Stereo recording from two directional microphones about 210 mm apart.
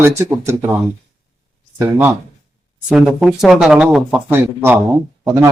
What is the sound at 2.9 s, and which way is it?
Speech, centre (ahead or behind).